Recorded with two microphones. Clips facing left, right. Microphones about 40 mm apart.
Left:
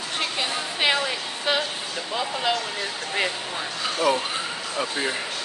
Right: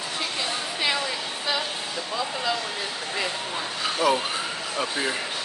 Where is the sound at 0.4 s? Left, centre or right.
Left.